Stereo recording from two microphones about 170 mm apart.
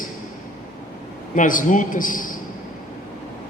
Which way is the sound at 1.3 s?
50° left (ahead or behind).